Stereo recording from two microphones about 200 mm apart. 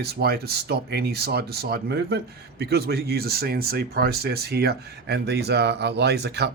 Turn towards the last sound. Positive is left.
turn(degrees=-55)  # may be behind; listen again after turning